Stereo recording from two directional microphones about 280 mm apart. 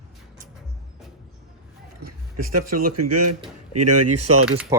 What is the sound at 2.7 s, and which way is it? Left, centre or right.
Speech, right.